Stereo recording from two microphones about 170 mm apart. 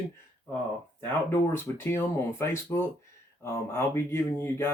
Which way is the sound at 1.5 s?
15° left (ahead or behind).